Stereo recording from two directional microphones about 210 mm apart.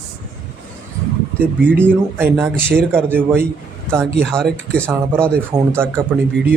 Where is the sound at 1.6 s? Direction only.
10° right (ahead or behind).